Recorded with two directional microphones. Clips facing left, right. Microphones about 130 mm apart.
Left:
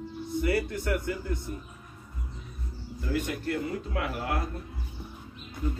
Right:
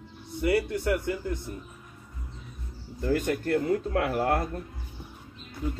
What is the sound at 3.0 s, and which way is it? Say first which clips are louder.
Speech: right 4 dB; 50° right (ahead or behind).